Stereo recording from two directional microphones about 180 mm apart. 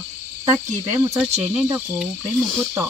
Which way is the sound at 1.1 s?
Centre (ahead or behind).